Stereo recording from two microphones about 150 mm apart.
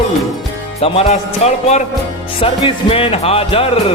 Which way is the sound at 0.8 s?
40° left (ahead or behind).